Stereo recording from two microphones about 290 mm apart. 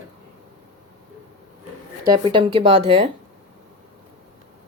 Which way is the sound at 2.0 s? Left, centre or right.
Centre.